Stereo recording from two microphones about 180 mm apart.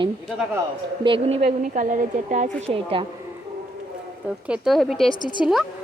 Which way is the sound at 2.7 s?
30° right (ahead or behind).